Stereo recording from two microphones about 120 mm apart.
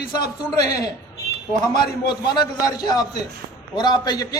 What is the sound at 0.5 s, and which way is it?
A man's voice, 30° left (ahead or behind).